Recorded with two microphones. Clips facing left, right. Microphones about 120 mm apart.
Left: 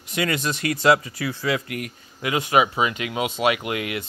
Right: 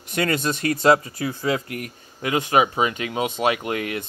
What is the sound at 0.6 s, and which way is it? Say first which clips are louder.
A man's voice: right 1 dB; 35° right (ahead or behind).